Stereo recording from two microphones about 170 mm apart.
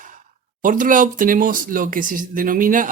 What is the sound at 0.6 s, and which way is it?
Speech, 50° right (ahead or behind).